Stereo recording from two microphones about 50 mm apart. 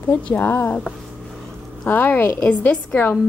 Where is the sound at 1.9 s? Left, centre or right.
Left.